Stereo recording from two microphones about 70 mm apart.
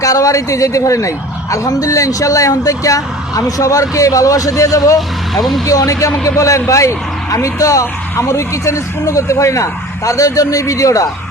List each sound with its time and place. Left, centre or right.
0.0 s speech: left
4.9 s speech: centre
5.6 s speech: left